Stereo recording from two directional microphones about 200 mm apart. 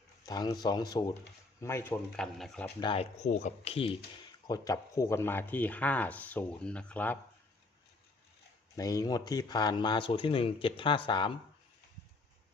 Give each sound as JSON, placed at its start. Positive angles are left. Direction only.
{"t": 0.3, "sound": "speech", "side_deg": 20}
{"t": 2.8, "sound": "speech", "side_deg": 30}
{"t": 4.4, "sound": "speech", "side_deg": 15}
{"t": 8.7, "sound": "speech", "side_deg": 15}